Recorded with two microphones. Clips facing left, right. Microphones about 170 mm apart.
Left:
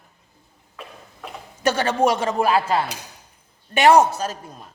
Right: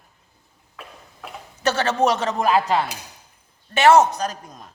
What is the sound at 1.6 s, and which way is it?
Speech, 10° left (ahead or behind).